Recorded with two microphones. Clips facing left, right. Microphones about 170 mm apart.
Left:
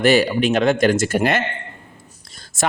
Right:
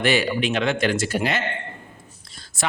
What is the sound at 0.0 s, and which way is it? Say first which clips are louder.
Speech: left 6 dB; 40° left (ahead or behind).